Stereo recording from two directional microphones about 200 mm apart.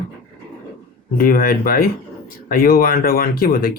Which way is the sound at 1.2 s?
45° left (ahead or behind).